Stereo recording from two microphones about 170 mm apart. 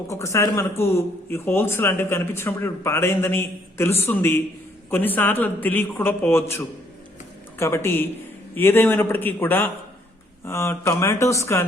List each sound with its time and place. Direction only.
0.1 s speech: 15° left (ahead or behind)